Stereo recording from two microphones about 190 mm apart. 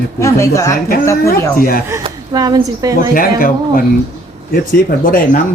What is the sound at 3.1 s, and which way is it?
Speech, 50° left (ahead or behind).